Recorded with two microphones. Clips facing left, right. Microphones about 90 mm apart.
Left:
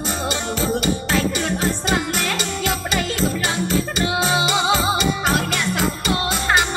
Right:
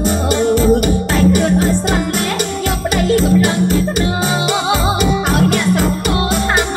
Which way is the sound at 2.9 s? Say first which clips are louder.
Right 14 dB; 50° right (ahead or behind).